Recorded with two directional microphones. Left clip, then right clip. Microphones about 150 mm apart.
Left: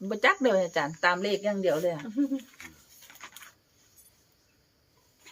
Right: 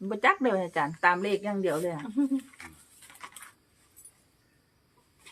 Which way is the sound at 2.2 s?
50° right (ahead or behind).